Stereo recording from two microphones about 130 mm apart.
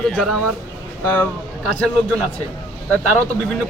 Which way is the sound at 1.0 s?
15° left (ahead or behind).